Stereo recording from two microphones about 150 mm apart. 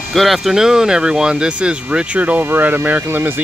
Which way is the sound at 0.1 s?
Centre (ahead or behind).